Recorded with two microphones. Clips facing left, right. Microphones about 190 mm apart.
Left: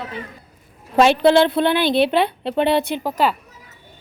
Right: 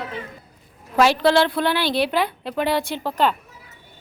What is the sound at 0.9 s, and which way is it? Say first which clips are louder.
A woman's voice: left 3 dB; 25° left (ahead or behind).